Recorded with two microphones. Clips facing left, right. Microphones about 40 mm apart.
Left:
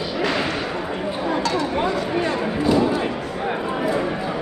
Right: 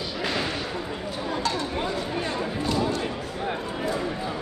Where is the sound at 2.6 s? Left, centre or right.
Centre.